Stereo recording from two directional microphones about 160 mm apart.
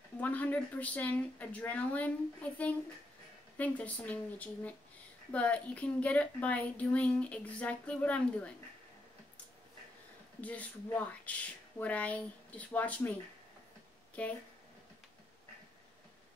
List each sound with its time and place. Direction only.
0.2 s a woman's voice: 10° left (ahead or behind)
10.4 s a woman's voice: 10° left (ahead or behind)
14.2 s a woman's voice: 10° left (ahead or behind)